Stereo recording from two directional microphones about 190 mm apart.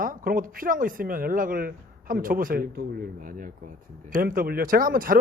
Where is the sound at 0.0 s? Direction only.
45° right (ahead or behind).